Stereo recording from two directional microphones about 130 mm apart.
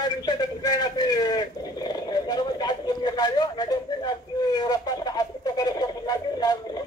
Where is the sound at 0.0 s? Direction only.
30° left (ahead or behind).